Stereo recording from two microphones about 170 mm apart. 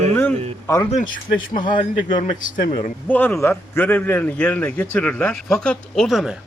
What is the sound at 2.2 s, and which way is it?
Speech, 50° left (ahead or behind).